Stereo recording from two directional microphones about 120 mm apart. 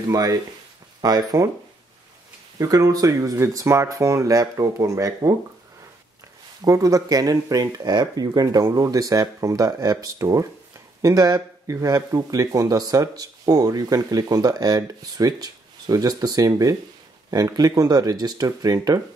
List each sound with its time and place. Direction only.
0.1 s speech: 30° right (ahead or behind)
2.6 s speech: 30° right (ahead or behind)
6.6 s speech: 30° right (ahead or behind)